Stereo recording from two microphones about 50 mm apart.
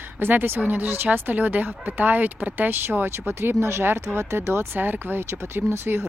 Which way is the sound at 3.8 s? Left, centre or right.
Right.